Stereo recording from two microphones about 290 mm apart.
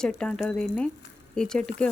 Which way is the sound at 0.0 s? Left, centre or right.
Centre.